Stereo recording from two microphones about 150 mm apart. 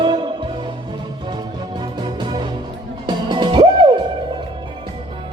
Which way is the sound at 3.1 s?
30° right (ahead or behind).